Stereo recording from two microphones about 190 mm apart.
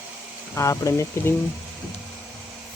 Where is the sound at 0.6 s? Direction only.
15° left (ahead or behind).